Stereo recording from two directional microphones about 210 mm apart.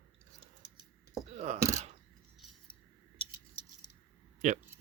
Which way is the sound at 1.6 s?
35° right (ahead or behind).